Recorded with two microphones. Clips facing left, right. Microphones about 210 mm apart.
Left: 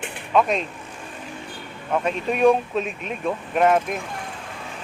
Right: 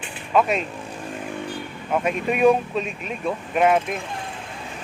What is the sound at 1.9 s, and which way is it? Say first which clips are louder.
Speech: right 1 dB; 10° right (ahead or behind).